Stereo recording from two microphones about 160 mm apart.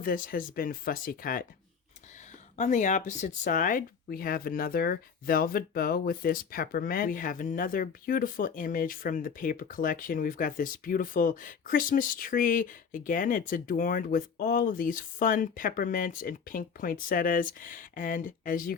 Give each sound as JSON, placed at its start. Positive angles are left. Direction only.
{"t": 0.0, "sound": "speech", "side_deg": 60}
{"t": 2.6, "sound": "speech", "side_deg": 50}